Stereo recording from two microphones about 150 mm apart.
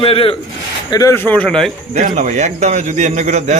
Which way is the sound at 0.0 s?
40° left (ahead or behind).